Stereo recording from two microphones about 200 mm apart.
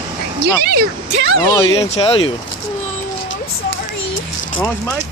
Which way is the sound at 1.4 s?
20° left (ahead or behind).